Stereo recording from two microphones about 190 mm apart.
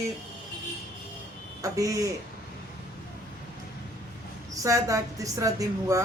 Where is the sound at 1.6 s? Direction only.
15° right (ahead or behind).